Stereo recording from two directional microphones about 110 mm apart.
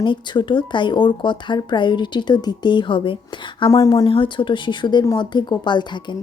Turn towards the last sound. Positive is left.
turn(degrees=45)  # may be behind; listen again after turning